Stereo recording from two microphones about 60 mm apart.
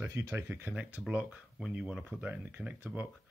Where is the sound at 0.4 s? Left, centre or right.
Right.